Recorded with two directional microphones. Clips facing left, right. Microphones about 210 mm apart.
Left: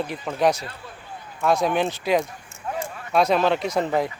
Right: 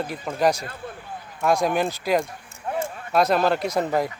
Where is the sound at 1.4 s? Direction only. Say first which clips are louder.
Even; 10° right (ahead or behind).